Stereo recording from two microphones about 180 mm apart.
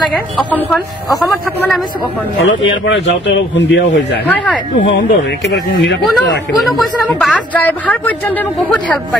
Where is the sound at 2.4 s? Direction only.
90° left; by 5.9 s 70° left (ahead or behind).